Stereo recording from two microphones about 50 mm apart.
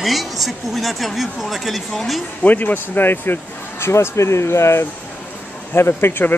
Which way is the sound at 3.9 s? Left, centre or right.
Left.